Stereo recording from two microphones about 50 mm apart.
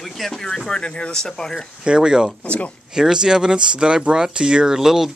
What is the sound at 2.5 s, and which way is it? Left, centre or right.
Speech, left.